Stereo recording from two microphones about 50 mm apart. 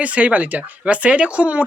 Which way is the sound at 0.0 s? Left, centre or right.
Right.